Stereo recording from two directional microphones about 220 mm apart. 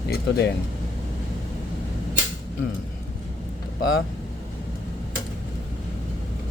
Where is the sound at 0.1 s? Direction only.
50° left (ahead or behind).